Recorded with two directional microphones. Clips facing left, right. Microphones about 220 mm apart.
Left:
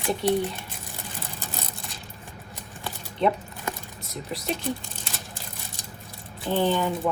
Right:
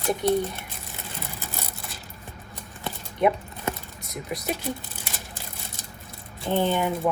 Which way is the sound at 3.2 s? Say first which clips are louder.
Right 2 dB; 15° right (ahead or behind).